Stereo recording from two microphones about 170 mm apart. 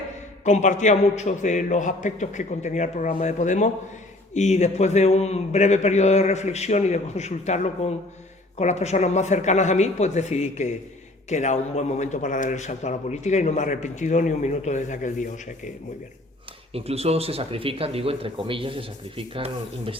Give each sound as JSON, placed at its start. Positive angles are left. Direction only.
{"t": 0.4, "sound": "a man's voice", "side_deg": 45}
{"t": 16.7, "sound": "speech", "side_deg": -35}